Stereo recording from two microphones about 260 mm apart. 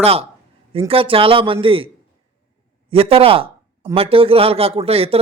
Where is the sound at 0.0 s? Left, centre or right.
Right.